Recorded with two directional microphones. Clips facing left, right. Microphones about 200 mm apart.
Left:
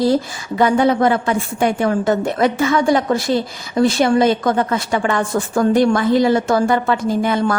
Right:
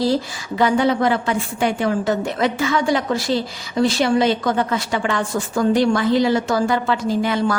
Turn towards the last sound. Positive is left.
turn(degrees=50)  # may be behind; listen again after turning